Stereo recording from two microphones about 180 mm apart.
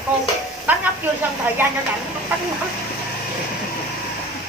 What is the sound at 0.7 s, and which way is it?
Speech, 10° right (ahead or behind).